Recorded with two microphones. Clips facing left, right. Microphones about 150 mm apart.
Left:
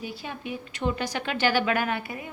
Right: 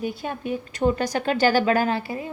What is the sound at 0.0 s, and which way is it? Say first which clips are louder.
A woman's voice: right 7 dB; 50° right (ahead or behind).